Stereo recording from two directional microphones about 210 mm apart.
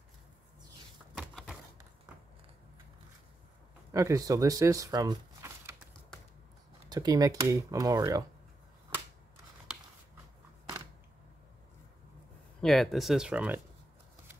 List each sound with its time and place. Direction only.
1.1 s a sound: centre (ahead or behind)
3.9 s speech: 15° right (ahead or behind)
6.9 s speech: 20° right (ahead or behind)
12.5 s speech: centre (ahead or behind)